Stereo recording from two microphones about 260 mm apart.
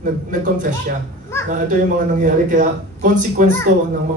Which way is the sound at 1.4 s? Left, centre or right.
Right.